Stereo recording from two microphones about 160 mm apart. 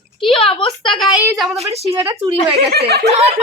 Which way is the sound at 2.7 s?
80° right.